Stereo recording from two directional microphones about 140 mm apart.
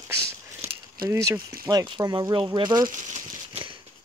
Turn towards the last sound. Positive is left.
turn(degrees=-45)  # may be behind; listen again after turning